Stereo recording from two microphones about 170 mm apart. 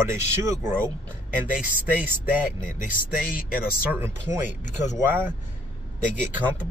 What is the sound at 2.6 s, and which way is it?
Speech, 50° left (ahead or behind).